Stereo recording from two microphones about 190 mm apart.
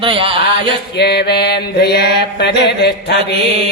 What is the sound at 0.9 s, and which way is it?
Mantra, 60° left (ahead or behind).